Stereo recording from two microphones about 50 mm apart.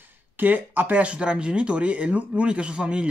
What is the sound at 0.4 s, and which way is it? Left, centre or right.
Speech, right.